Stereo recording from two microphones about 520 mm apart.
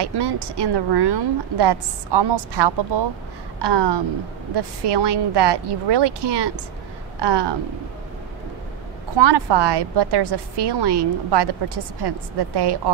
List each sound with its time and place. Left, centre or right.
0.0 s a woman's voice: right
9.1 s a woman's voice: right